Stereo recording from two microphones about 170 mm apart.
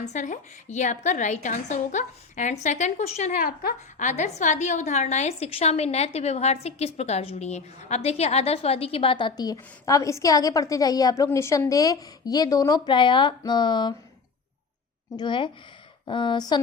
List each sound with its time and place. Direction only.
0.0 s a woman's voice: 45° left (ahead or behind)
3.3 s a woman's voice: 65° left (ahead or behind)
4.0 s a woman's voice: 45° left (ahead or behind); by 13.9 s 25° left (ahead or behind)
15.1 s speech: 25° left (ahead or behind)